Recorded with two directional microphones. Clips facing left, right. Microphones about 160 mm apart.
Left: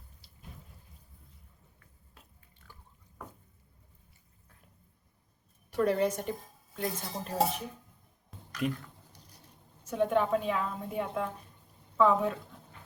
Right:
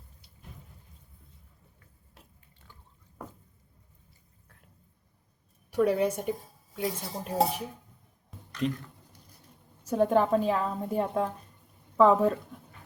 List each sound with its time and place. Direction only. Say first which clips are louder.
5.7 s speech: right 2 dB; 10° right (ahead or behind)
8.3 s a sound: right 2 dB; centre (ahead or behind)
9.8 s a woman's voice: right 4 dB; 40° right (ahead or behind)